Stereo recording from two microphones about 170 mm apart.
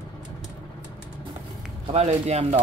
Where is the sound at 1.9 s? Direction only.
40° right (ahead or behind).